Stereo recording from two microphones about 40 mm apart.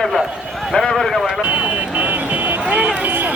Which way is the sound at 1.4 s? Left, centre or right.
Right.